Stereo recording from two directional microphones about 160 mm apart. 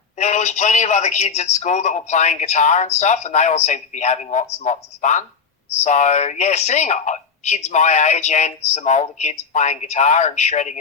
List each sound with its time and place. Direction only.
0.2 s speech: 45° left (ahead or behind)